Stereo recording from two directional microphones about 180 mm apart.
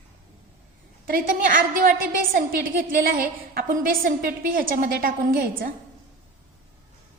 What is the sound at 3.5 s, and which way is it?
A woman's voice, 50° right (ahead or behind).